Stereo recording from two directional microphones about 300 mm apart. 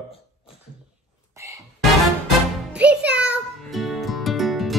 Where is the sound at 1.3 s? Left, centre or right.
Centre.